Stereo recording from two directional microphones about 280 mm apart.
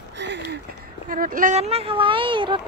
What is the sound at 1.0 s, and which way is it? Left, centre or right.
Speech, right.